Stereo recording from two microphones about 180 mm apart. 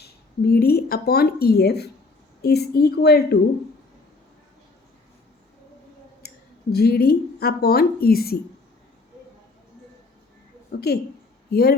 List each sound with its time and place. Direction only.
0.0 s a woman's voice: 60° left (ahead or behind)
6.2 s clicking: 60° left (ahead or behind)
6.7 s a woman's voice: 60° left (ahead or behind)
10.7 s a woman's voice: 65° left (ahead or behind)